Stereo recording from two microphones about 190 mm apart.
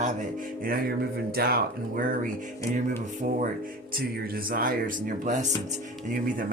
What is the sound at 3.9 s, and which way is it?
Speech, 50° right (ahead or behind).